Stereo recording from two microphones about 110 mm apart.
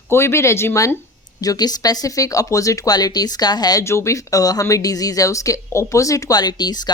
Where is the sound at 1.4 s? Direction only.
35° left (ahead or behind).